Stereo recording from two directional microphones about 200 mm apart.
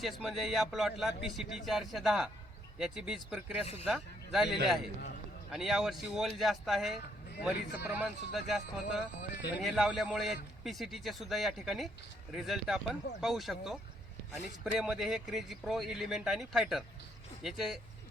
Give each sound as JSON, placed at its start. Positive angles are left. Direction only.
{"t": 0.0, "sound": "a man's voice", "side_deg": 0}
{"t": 9.2, "sound": "speech", "side_deg": 55}
{"t": 9.6, "sound": "a man's voice", "side_deg": 0}